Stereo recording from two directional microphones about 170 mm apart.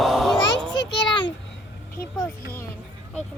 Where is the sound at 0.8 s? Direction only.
90° left.